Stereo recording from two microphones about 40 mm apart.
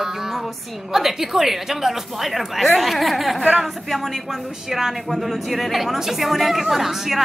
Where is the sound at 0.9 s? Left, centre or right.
Centre.